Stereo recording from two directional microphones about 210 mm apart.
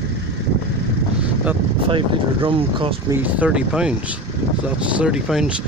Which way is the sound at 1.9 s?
25° right (ahead or behind).